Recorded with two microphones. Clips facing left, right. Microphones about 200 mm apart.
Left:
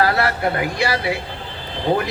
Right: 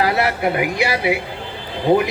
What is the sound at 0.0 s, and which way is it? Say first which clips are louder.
A man's voice: right 1 dB; 15° right (ahead or behind).